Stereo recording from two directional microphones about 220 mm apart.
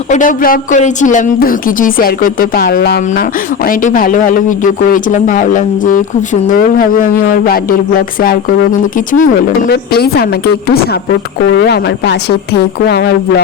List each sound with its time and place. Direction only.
0.1 s speech: 35° left (ahead or behind)
9.0 s a woman's voice: 35° left (ahead or behind)